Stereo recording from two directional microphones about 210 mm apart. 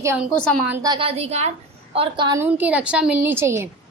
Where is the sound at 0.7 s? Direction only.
20° right (ahead or behind).